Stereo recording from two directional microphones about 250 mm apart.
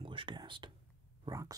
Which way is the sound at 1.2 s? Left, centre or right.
Centre.